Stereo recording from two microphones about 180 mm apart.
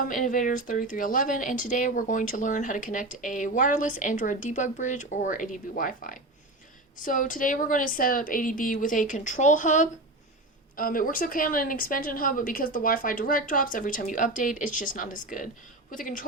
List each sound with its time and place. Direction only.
0.1 s speech: 50° left (ahead or behind)